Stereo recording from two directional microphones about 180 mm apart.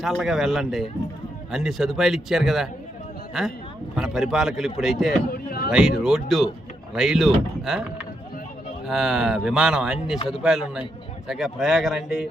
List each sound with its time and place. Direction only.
0.0 s speech: centre (ahead or behind)
5.3 s a sound: 55° left (ahead or behind)
6.0 s speech: centre (ahead or behind)